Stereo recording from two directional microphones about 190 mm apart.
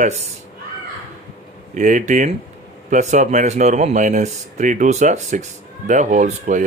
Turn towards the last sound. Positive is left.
turn(degrees=-40)  # may be behind; listen again after turning